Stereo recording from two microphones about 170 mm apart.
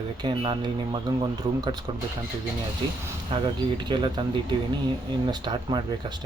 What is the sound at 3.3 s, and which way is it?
Speech, 25° right (ahead or behind).